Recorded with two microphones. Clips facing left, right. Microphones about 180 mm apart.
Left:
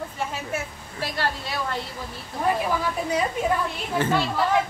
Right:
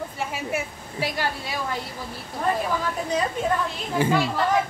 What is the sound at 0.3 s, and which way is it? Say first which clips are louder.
A woman's voice: right 2 dB; 10° right (ahead or behind).